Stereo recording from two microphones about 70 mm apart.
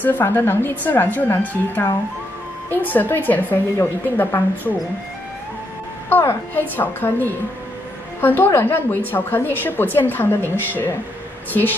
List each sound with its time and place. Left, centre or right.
0.0 s a woman's voice: left
6.0 s a woman's voice: left